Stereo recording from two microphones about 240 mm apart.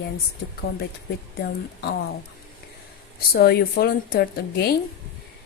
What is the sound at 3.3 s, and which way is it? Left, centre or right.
A woman's voice, left.